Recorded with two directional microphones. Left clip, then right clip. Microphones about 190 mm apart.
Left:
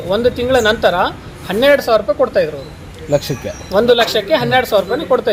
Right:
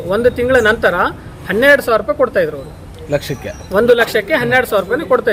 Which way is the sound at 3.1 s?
35° left (ahead or behind).